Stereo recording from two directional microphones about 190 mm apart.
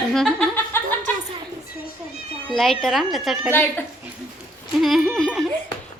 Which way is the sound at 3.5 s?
10° left (ahead or behind).